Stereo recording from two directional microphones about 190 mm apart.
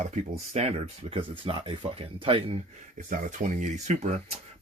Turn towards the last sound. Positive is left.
turn(degrees=-40)  # may be behind; listen again after turning